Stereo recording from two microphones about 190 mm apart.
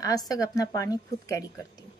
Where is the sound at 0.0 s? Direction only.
20° left (ahead or behind).